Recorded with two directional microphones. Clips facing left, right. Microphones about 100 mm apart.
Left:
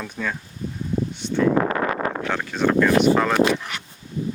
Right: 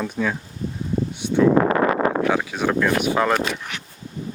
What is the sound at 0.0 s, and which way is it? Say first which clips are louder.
Speech: right 5 dB; 10° right (ahead or behind).